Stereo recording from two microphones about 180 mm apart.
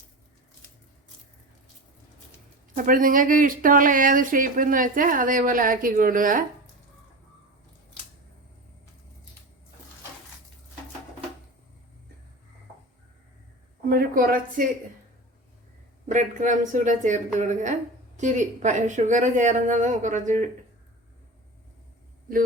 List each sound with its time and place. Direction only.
2.7 s speech: 50° right (ahead or behind)
13.8 s a woman's voice: 55° right (ahead or behind)
16.0 s speech: 45° right (ahead or behind)